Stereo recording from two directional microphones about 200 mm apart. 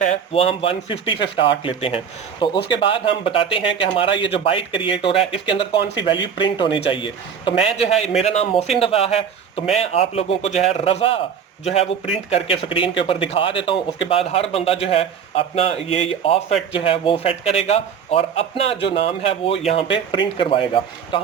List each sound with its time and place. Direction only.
0.0 s a man's voice: 35° left (ahead or behind)